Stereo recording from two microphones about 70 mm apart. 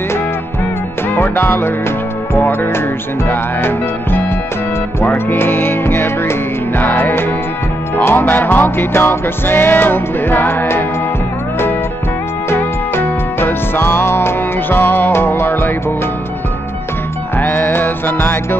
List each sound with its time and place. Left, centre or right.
1.1 s music: left
12.4 s music: left
17.4 s music: left